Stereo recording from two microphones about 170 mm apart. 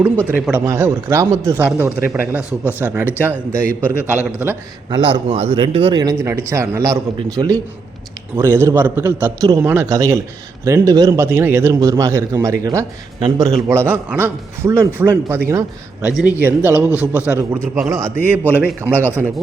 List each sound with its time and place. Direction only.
0.3 s speech: 10° right (ahead or behind)
4.9 s speech: 30° right (ahead or behind); by 19.0 s 10° right (ahead or behind)